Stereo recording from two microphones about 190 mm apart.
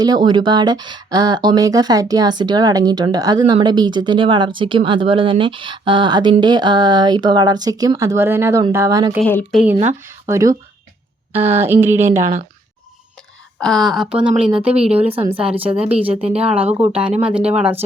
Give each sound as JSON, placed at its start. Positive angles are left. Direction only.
{"t": 0.0, "sound": "speech", "side_deg": -20}
{"t": 9.2, "sound": "a woman's voice", "side_deg": 10}
{"t": 10.1, "sound": "speech", "side_deg": -15}
{"t": 13.6, "sound": "a woman's voice", "side_deg": 0}